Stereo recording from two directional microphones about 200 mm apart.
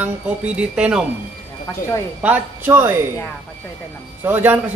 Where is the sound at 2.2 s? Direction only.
10° right (ahead or behind).